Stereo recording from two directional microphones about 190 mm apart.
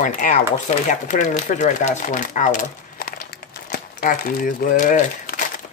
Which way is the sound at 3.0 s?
50° left (ahead or behind).